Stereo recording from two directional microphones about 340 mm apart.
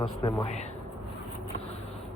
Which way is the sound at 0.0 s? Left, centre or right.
Centre.